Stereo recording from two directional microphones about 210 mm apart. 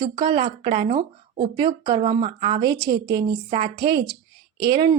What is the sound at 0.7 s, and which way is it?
Speech, 40° right (ahead or behind).